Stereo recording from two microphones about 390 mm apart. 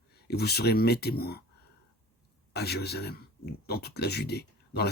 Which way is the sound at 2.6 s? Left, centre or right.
Left.